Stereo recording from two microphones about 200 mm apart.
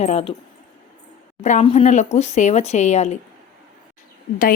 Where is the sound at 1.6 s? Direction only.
30° left (ahead or behind).